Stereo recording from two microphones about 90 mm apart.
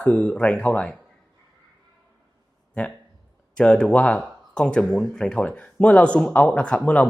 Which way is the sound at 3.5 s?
10° left (ahead or behind).